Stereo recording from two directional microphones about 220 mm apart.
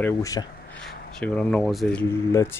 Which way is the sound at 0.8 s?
5° left (ahead or behind).